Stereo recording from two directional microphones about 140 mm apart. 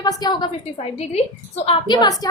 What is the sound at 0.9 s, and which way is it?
A woman's voice, 45° left (ahead or behind).